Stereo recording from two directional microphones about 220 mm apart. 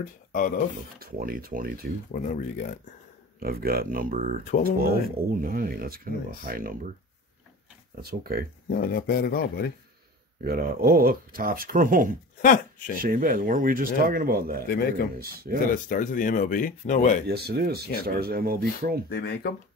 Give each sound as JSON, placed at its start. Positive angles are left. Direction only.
{"t": 0.0, "sound": "speech", "side_deg": 40}
{"t": 0.9, "sound": "speech", "side_deg": -40}
{"t": 2.1, "sound": "speech", "side_deg": 35}
{"t": 3.3, "sound": "speech", "side_deg": -45}
{"t": 8.0, "sound": "speech", "side_deg": -45}
{"t": 8.6, "sound": "speech", "side_deg": 45}
{"t": 10.4, "sound": "speech", "side_deg": -45}
{"t": 12.4, "sound": "speech", "side_deg": 40}
{"t": 13.0, "sound": "speech", "side_deg": -40}
{"t": 14.7, "sound": "speech", "side_deg": 45}
{"t": 15.1, "sound": "speech", "side_deg": -45}
{"t": 15.7, "sound": "speech", "side_deg": 40}
{"t": 17.3, "sound": "speech", "side_deg": -45}
{"t": 19.0, "sound": "speech", "side_deg": 45}